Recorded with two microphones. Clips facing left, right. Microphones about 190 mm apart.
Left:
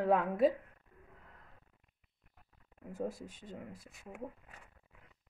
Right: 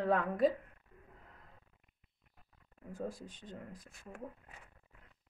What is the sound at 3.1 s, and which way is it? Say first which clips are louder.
Speech: left 1 dB; 5° left (ahead or behind).